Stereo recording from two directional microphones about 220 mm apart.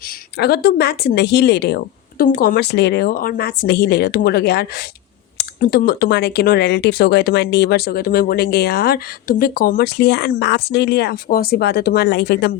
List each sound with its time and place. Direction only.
0.3 s speech: 45° left (ahead or behind)